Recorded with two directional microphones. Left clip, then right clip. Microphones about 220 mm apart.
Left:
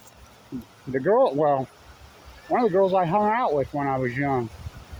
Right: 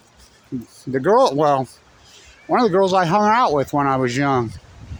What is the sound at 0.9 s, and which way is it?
Speech, 40° right (ahead or behind).